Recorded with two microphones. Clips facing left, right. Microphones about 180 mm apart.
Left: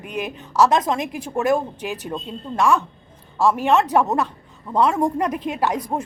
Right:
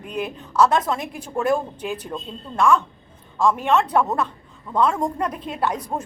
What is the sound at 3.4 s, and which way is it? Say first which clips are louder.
A woman's voice: left 2 dB; 5° left (ahead or behind).